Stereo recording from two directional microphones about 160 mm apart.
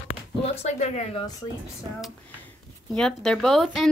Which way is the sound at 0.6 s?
45° left (ahead or behind).